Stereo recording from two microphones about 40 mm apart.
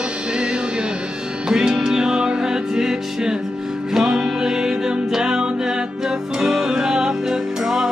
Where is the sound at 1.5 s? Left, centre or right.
Centre.